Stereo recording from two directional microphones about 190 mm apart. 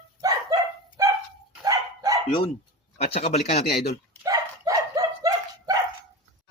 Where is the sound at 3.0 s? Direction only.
30° left (ahead or behind).